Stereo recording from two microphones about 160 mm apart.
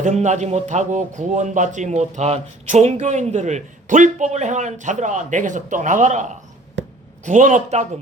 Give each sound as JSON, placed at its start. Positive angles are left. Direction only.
{"t": 0.0, "sound": "speech", "side_deg": -50}